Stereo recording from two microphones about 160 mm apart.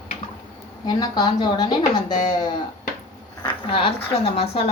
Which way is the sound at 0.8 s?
25° left (ahead or behind).